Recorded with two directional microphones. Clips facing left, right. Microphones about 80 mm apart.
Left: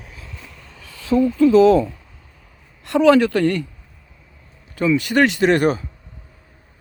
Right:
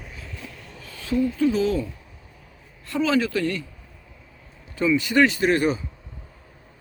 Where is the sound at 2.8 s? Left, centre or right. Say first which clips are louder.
Left 9 dB; left.